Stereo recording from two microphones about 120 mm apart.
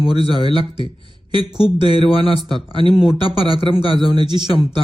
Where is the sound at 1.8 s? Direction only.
50° left (ahead or behind).